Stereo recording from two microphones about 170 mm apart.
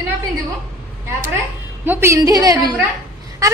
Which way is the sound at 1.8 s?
15° right (ahead or behind).